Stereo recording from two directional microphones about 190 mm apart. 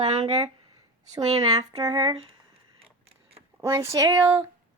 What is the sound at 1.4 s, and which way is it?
Speech, 20° right (ahead or behind).